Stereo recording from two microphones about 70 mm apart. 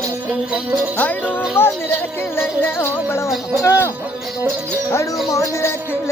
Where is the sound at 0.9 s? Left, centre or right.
Left.